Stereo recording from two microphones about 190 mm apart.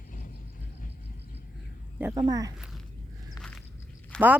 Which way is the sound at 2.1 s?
20° right (ahead or behind).